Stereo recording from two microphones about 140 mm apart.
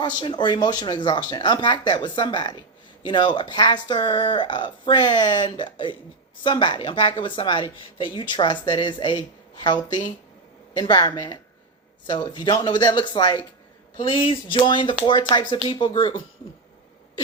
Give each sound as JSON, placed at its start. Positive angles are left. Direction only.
{"t": 0.0, "sound": "speech", "side_deg": 35}